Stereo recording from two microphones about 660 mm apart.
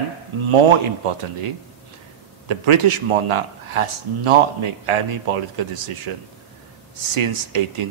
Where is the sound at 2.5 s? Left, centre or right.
Right.